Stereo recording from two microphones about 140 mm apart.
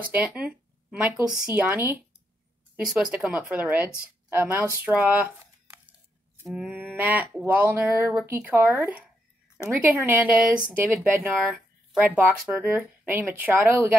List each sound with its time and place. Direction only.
0.1 s a woman's voice: 10° right (ahead or behind)
4.8 s a sound: 10° right (ahead or behind)
6.4 s a woman's voice: 5° right (ahead or behind)